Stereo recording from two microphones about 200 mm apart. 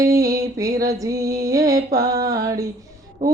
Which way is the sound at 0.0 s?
15° right (ahead or behind).